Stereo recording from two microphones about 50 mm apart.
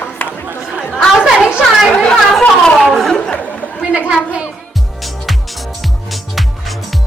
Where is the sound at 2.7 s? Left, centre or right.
Centre.